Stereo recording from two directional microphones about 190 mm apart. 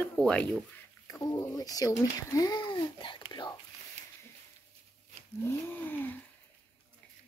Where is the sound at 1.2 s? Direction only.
10° left (ahead or behind).